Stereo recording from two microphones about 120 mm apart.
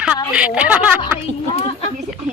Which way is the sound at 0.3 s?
10° right (ahead or behind).